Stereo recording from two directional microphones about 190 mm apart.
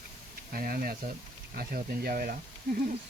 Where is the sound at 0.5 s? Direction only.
50° right (ahead or behind).